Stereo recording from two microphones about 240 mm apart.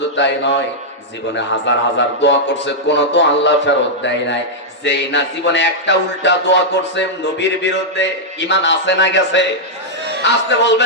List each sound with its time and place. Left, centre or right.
0.2 s speech: left